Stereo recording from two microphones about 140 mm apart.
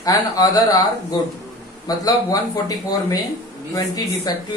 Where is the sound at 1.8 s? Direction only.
25° left (ahead or behind).